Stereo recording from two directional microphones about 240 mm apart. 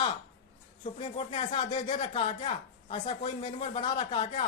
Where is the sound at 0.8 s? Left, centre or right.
Left.